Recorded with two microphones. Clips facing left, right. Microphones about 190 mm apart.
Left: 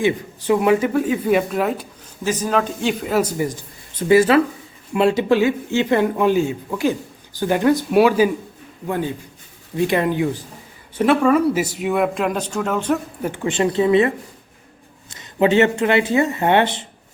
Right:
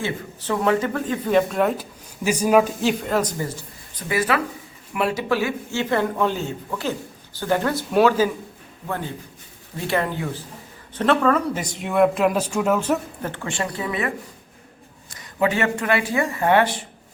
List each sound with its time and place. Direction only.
0.0 s speech: 15° left (ahead or behind)
2.2 s a man's voice: 10° right (ahead or behind)
3.0 s speech: 5° left (ahead or behind)
3.9 s speech: 25° left (ahead or behind); by 8.3 s 10° left (ahead or behind)
9.8 s speech: 15° left (ahead or behind); by 13.0 s 5° right (ahead or behind)
13.2 s speech: 15° left (ahead or behind)
15.1 s speech: 25° left (ahead or behind)